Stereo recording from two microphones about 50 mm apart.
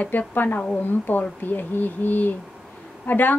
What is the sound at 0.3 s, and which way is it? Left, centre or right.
A woman's voice, left.